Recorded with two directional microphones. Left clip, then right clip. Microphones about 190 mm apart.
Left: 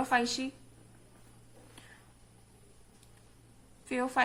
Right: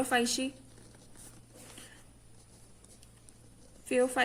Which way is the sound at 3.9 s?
35° right (ahead or behind).